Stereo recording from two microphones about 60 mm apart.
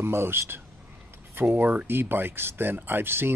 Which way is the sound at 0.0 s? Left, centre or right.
Right.